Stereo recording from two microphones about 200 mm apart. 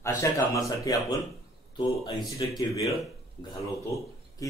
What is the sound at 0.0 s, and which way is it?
A man's voice, 15° left (ahead or behind).